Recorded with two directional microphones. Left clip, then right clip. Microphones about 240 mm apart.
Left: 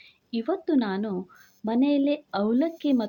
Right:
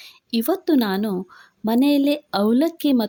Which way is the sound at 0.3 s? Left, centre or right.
Right.